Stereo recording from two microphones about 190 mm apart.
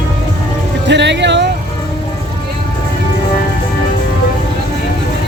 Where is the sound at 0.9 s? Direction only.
65° right (ahead or behind).